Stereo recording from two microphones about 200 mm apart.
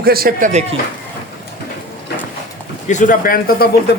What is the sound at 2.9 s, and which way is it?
Speech, 40° left (ahead or behind).